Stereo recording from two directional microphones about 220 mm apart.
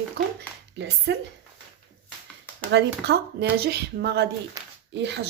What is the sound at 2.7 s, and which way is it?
Speech, 50° right (ahead or behind).